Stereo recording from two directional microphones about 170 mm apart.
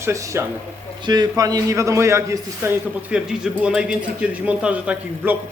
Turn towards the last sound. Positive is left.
turn(degrees=-10)  # may be behind; listen again after turning